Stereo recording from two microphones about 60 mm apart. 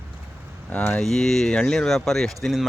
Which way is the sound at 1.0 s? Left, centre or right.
Centre.